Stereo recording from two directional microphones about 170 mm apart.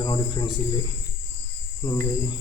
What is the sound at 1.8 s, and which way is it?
Speech, 20° left (ahead or behind).